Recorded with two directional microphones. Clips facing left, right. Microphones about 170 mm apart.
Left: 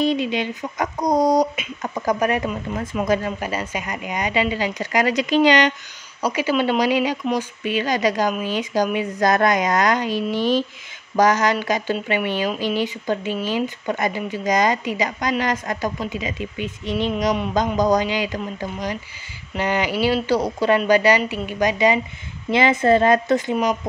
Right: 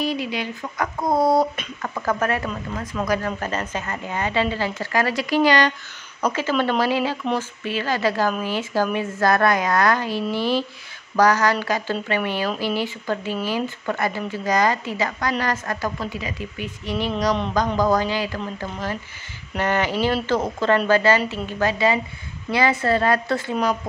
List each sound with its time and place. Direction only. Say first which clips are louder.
0.0 s speech: left 4 dB; 20° left (ahead or behind)